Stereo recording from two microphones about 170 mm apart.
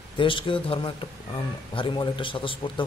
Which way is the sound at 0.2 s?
30° left (ahead or behind).